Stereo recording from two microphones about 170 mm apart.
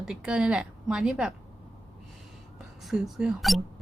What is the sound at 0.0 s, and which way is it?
Speech, 5° right (ahead or behind).